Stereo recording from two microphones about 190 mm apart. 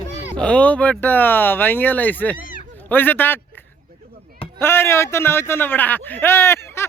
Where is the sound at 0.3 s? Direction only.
5° left (ahead or behind).